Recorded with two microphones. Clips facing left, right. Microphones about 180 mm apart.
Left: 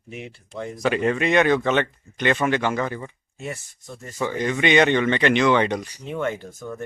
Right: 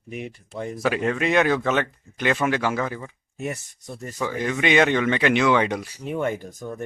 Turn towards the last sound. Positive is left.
turn(degrees=-15)  # may be behind; listen again after turning